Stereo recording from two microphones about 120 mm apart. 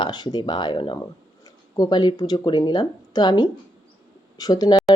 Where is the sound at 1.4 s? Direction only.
30° left (ahead or behind).